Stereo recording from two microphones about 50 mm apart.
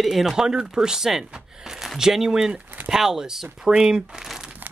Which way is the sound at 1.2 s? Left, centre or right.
Centre.